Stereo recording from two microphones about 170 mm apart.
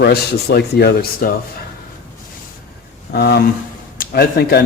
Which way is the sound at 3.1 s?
75° left (ahead or behind).